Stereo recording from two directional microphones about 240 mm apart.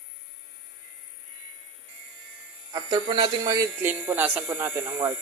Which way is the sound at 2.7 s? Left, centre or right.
Centre.